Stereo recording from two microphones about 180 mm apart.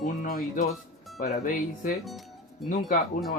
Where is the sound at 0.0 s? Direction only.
50° left (ahead or behind).